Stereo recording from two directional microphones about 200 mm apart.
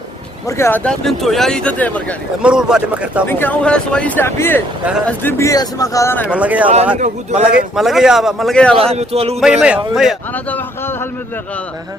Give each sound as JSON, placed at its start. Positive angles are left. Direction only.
{"t": 0.4, "sound": "speech", "side_deg": 15}
{"t": 2.4, "sound": "speech", "side_deg": -5}
{"t": 3.2, "sound": "speech", "side_deg": 10}
{"t": 6.2, "sound": "speech", "side_deg": -5}
{"t": 7.0, "sound": "speech", "side_deg": -35}
{"t": 7.8, "sound": "speech", "side_deg": 0}
{"t": 8.9, "sound": "speech", "side_deg": -30}
{"t": 9.4, "sound": "speech", "side_deg": -5}